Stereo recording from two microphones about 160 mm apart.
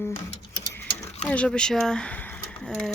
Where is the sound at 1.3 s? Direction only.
5° left (ahead or behind).